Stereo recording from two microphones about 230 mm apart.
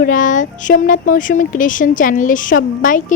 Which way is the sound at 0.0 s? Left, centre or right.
Left.